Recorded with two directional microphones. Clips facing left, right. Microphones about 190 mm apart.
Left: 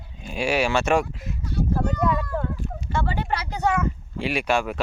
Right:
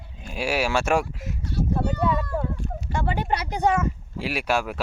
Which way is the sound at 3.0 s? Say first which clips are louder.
Right 4 dB; 15° right (ahead or behind).